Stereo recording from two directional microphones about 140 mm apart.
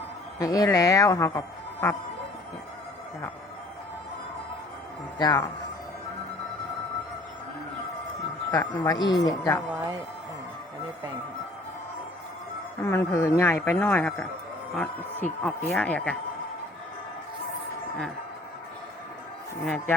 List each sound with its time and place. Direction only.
0.3 s a woman's voice: 25° left (ahead or behind)
5.1 s a woman's voice: 25° left (ahead or behind)
8.4 s a woman's voice: 25° left (ahead or behind)
12.8 s speech: 15° left (ahead or behind)